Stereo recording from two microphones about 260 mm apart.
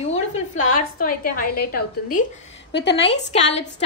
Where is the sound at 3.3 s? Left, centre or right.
Left.